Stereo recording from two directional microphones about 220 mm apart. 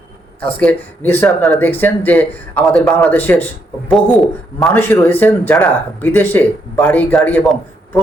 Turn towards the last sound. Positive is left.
turn(degrees=5)  # may be behind; listen again after turning